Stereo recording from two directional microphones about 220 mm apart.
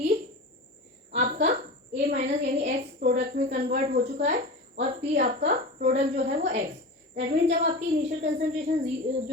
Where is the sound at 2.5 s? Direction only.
45° right (ahead or behind).